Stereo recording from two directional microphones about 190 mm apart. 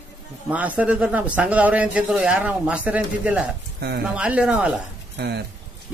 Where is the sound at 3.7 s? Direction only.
60° right (ahead or behind).